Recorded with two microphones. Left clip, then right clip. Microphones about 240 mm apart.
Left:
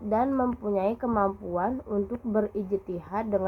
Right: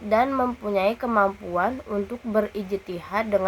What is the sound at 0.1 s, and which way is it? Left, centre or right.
A woman's voice, right.